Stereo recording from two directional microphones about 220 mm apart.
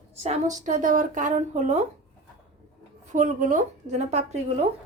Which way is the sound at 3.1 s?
35° right (ahead or behind).